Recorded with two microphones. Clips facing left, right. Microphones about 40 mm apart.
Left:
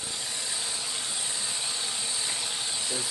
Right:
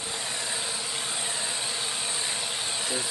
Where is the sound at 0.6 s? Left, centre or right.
Centre.